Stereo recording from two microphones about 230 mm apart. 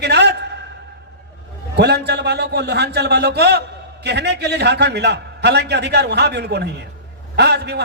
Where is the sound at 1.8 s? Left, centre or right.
Right.